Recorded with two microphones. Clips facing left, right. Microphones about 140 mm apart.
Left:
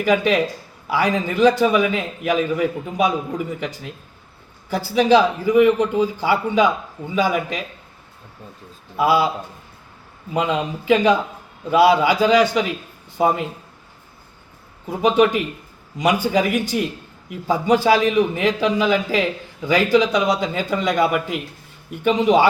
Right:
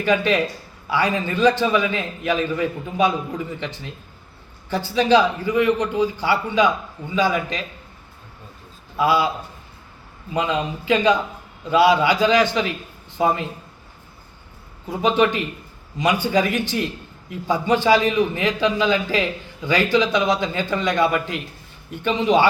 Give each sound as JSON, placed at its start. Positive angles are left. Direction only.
{"t": 0.0, "sound": "a man's voice", "side_deg": 0}
{"t": 4.7, "sound": "a man's voice", "side_deg": 5}
{"t": 9.0, "sound": "a man's voice", "side_deg": 5}
{"t": 10.3, "sound": "a man's voice", "side_deg": 5}
{"t": 15.0, "sound": "a man's voice", "side_deg": 0}